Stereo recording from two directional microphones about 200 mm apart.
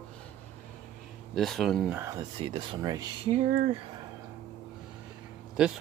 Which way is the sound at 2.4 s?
25° right (ahead or behind).